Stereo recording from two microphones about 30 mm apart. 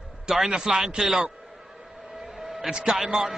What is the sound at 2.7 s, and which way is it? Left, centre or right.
Speech, right.